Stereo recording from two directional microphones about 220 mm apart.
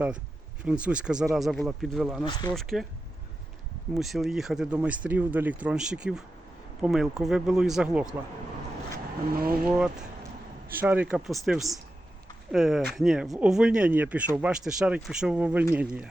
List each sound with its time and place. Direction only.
0.6 s speech: 5° right (ahead or behind)
2.2 s speech: 20° left (ahead or behind)
2.5 s speech: centre (ahead or behind)
3.9 s speech: centre (ahead or behind)
9.3 s speech: 45° right (ahead or behind)
9.7 s speech: 5° right (ahead or behind)